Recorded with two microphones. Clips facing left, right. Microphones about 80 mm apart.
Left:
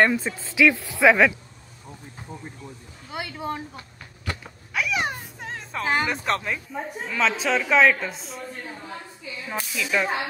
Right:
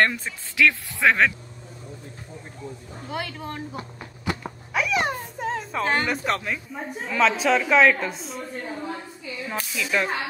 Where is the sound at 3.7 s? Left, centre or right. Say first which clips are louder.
Right 7 dB; centre.